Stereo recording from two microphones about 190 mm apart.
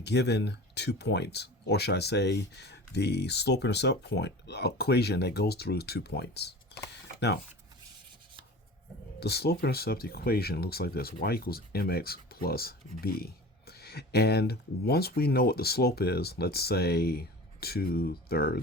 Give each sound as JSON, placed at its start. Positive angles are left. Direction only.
{"t": 0.0, "sound": "speech", "side_deg": 60}
{"t": 9.2, "sound": "speech", "side_deg": 55}